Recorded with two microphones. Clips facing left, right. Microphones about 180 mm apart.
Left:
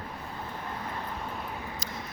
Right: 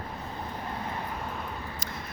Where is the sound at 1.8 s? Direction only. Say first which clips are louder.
Even; 55° right (ahead or behind).